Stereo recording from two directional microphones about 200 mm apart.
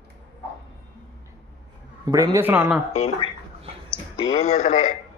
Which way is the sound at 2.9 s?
30° left (ahead or behind).